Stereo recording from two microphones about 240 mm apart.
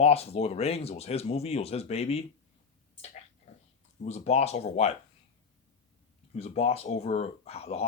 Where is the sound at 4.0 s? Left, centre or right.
Left.